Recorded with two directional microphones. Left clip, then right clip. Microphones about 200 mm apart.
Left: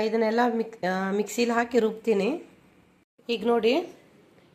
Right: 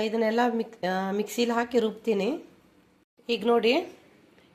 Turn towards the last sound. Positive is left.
turn(degrees=0)  # may be behind; listen again after turning